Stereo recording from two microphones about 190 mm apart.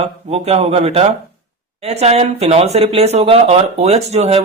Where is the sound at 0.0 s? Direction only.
35° right (ahead or behind).